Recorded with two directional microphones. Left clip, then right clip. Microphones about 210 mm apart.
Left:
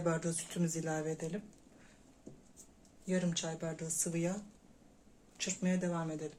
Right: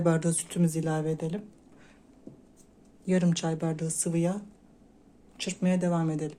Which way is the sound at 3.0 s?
55° right (ahead or behind).